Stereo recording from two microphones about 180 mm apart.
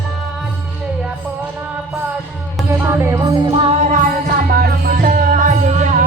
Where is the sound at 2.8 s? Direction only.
15° right (ahead or behind).